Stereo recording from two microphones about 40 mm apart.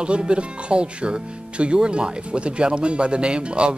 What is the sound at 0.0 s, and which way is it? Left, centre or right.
Speech, right.